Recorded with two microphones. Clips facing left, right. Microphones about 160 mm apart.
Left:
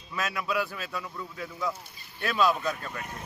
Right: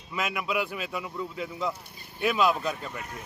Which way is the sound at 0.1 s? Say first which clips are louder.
Right 1 dB; 15° right (ahead or behind).